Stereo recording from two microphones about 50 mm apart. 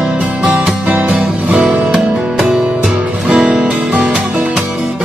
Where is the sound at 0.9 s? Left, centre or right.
Right.